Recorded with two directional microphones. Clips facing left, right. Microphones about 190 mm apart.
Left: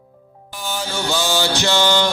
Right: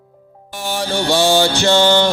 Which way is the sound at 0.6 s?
65° right (ahead or behind).